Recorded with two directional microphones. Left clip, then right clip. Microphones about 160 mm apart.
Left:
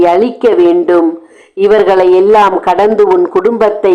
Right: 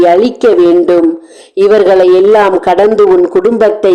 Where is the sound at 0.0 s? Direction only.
5° left (ahead or behind).